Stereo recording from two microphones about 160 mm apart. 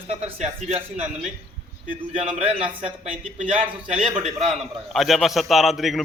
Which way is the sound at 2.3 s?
40° right (ahead or behind).